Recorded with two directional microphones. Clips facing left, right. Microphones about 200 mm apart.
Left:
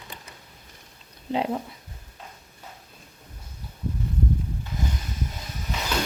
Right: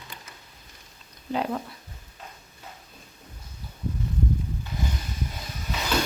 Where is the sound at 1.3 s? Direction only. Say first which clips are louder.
Left 2 dB; 25° left (ahead or behind).